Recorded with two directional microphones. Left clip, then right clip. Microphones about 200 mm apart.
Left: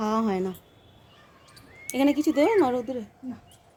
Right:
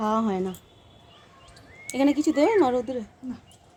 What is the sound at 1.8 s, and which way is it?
Speech, 5° left (ahead or behind).